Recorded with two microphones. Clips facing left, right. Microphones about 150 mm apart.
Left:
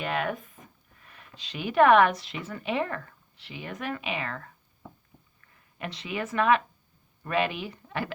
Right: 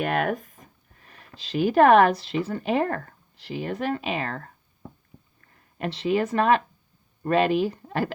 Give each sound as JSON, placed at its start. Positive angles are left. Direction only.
{"t": 0.0, "sound": "speech", "side_deg": -50}